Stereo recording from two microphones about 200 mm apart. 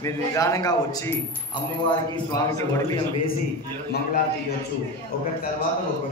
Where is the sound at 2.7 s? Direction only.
15° left (ahead or behind).